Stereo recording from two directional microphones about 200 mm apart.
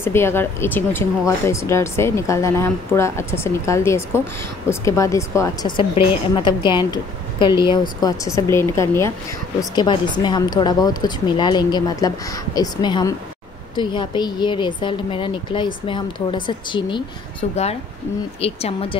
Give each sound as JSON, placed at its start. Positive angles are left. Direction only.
{"t": 0.0, "sound": "a woman's voice", "side_deg": 10}